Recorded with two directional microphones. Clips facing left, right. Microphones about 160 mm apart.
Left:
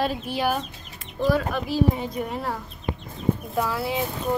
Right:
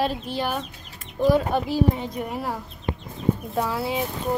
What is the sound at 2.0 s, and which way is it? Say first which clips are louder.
Speech: left 1 dB; 5° right (ahead or behind).